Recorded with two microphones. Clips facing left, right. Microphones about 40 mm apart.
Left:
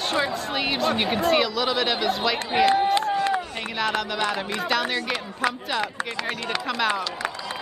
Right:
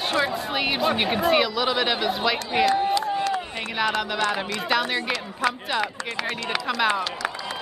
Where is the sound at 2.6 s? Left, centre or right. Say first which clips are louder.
Left 2 dB; left.